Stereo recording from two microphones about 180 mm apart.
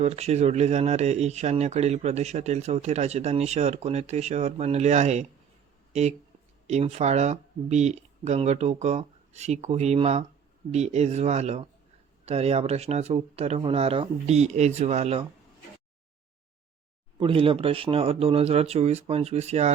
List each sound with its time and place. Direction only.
0.0 s speech: 35° right (ahead or behind)
17.2 s speech: 30° right (ahead or behind)